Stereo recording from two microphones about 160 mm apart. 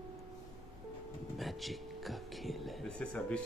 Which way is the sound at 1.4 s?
Centre (ahead or behind).